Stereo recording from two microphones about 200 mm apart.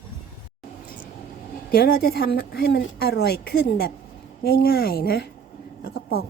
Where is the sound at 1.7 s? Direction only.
50° left (ahead or behind).